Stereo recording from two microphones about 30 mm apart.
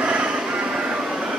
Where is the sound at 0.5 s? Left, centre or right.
Right.